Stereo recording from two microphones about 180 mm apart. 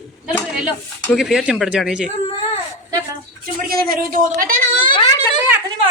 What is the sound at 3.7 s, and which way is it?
A woman's voice, 55° right (ahead or behind).